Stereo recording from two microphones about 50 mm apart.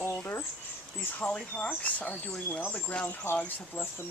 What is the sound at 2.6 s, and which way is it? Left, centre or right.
Speech, left.